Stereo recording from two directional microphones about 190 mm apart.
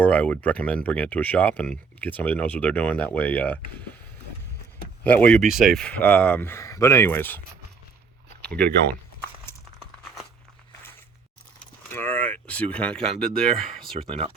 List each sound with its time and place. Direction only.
0.0 s speech: 5° left (ahead or behind)
5.0 s speech: 5° left (ahead or behind)
11.9 s speech: 10° left (ahead or behind)
14.1 s speech: 30° right (ahead or behind)